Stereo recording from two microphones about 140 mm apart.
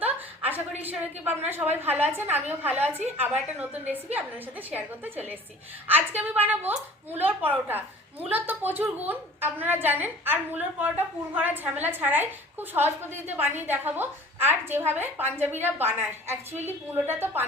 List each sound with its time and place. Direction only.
0.4 s a woman's voice: 10° right (ahead or behind)